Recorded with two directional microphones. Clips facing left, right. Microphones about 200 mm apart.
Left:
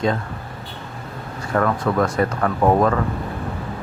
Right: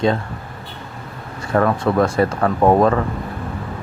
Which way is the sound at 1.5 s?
30° right (ahead or behind).